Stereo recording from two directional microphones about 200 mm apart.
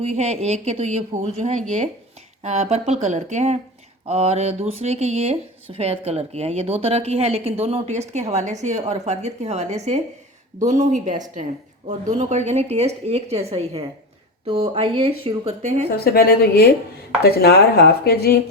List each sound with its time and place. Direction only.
0.0 s speech: 35° right (ahead or behind)
16.0 s speech: 50° left (ahead or behind)